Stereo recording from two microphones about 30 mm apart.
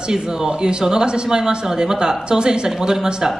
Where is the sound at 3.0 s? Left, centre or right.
Right.